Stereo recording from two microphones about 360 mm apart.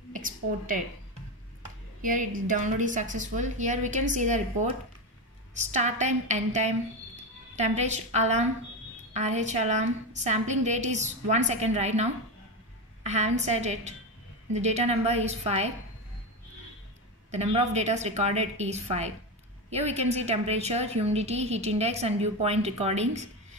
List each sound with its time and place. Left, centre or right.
0.1 s a sound: right
2.0 s a woman's voice: right
17.3 s a woman's voice: centre